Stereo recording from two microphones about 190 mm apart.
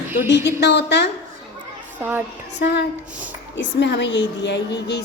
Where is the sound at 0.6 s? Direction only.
65° left (ahead or behind).